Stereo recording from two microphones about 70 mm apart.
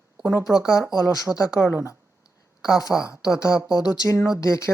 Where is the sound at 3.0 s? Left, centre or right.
Left.